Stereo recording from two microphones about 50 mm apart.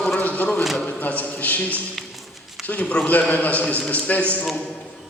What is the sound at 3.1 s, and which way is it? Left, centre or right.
A man's voice, left.